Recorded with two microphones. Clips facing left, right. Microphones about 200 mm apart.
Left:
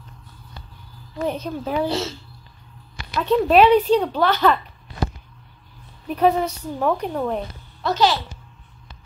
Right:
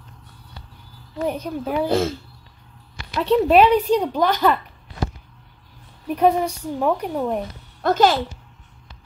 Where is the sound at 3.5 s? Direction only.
10° right (ahead or behind).